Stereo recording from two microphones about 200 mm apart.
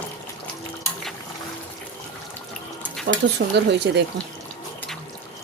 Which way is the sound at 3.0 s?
55° right (ahead or behind).